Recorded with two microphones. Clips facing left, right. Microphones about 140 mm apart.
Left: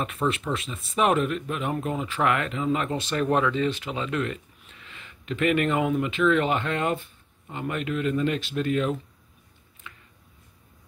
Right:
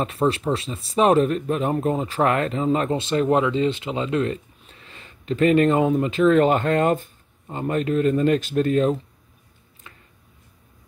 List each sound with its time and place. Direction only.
0.0 s speech: 35° right (ahead or behind)
3.0 s speech: 25° right (ahead or behind)
9.8 s a sound: 35° right (ahead or behind)